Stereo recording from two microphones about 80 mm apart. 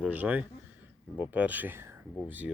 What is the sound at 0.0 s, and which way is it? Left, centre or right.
Speech, centre.